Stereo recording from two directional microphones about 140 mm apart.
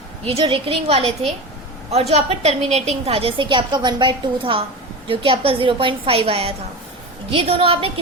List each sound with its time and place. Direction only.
0.3 s a woman's voice: 40° right (ahead or behind)